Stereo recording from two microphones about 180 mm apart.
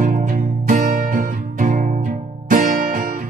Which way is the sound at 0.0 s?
45° right (ahead or behind).